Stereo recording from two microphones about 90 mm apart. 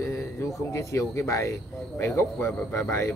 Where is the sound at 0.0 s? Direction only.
30° left (ahead or behind).